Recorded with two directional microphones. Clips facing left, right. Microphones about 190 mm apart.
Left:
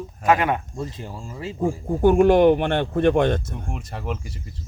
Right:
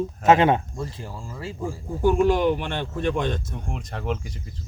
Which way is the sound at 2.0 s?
55° left (ahead or behind).